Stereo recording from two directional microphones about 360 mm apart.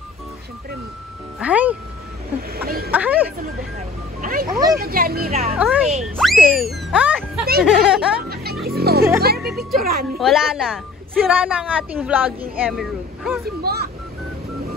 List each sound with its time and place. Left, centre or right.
1.4 s speech: centre
2.5 s a sound: right
2.9 s a sound: centre
4.2 s speech: right
4.5 s speech: centre
4.7 s speech: right
5.6 s speech: centre
8.6 s a sound: right
9.4 s speech: centre
9.8 s speech: right
10.1 s speech: centre
13.7 s speech: right